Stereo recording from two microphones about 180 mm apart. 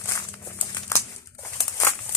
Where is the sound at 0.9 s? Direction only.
15° left (ahead or behind).